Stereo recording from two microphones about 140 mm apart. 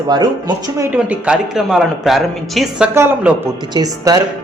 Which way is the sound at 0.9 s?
10° right (ahead or behind).